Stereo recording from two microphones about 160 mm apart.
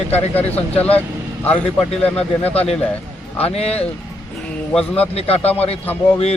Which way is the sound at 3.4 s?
40° left (ahead or behind).